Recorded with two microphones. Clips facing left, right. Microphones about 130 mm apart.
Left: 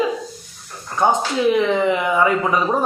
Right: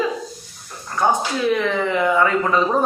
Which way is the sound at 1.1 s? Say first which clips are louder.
Left 2 dB; 20° left (ahead or behind).